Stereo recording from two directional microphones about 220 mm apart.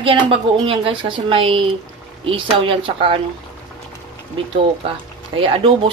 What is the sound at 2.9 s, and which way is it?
Speech, 25° right (ahead or behind).